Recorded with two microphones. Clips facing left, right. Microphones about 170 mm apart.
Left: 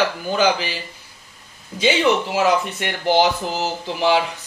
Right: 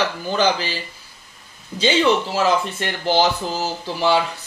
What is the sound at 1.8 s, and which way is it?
Speech, 10° left (ahead or behind).